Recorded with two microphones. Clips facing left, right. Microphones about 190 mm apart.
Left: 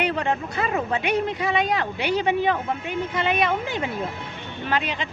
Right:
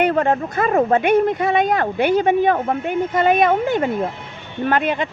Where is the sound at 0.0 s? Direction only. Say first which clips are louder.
Right 7 dB; 50° right (ahead or behind).